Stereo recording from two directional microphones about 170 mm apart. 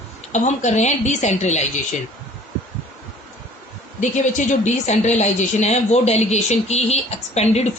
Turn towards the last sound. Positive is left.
turn(degrees=40)  # may be behind; listen again after turning